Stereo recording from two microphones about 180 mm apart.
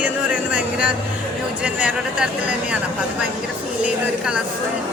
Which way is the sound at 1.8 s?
10° right (ahead or behind).